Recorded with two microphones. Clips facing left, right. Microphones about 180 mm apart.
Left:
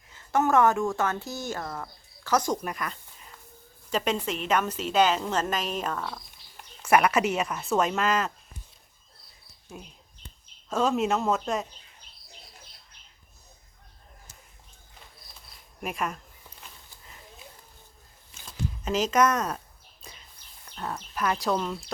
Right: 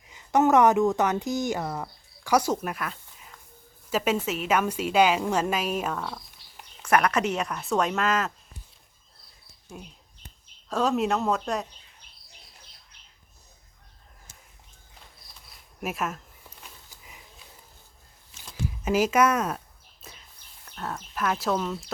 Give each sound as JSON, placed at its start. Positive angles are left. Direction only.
{"t": 0.1, "sound": "a woman's voice", "side_deg": -15}
{"t": 6.8, "sound": "speech", "side_deg": 10}
{"t": 9.7, "sound": "speech", "side_deg": 0}
{"t": 15.8, "sound": "speech", "side_deg": -5}
{"t": 18.9, "sound": "a sound", "side_deg": -10}
{"t": 20.7, "sound": "speech", "side_deg": 0}